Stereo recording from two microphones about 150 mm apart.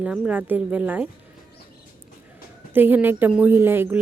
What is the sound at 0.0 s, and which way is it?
Speech, 10° right (ahead or behind).